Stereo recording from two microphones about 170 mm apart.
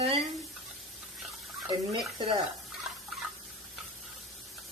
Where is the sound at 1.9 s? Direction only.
25° right (ahead or behind).